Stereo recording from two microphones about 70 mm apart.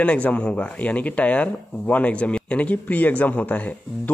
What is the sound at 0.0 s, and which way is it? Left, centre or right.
Speech, centre.